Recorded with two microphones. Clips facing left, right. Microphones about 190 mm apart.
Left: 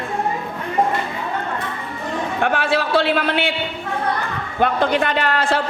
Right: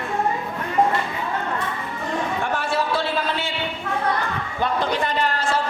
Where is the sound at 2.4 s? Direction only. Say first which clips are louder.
Left 4 dB; 75° left (ahead or behind).